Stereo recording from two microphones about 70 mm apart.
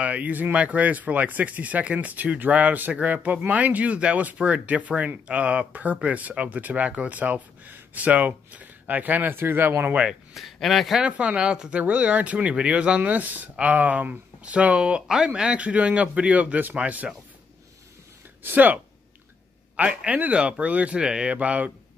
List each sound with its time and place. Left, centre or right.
0.0 s speech: right
10.3 s speech: centre
11.0 s speech: centre
18.4 s speech: right
19.8 s speech: right